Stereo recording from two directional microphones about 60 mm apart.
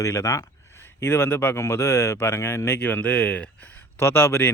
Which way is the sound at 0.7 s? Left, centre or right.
Left.